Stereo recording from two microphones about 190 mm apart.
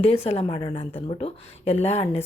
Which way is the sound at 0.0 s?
30° left (ahead or behind).